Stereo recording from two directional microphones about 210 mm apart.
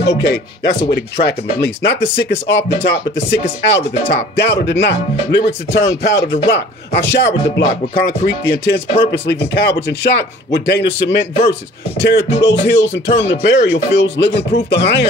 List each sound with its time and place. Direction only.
0.8 s speech: 50° left (ahead or behind)